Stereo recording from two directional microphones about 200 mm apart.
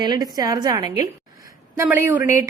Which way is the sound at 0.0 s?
20° right (ahead or behind).